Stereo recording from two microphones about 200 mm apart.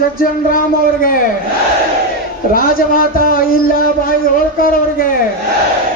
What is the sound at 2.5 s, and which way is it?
A man's voice, 45° left (ahead or behind).